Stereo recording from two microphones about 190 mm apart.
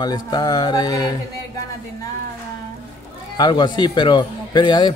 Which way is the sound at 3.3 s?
20° left (ahead or behind).